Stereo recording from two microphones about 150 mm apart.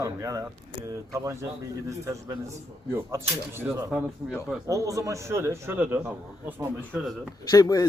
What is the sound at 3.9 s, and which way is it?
Speech, centre (ahead or behind).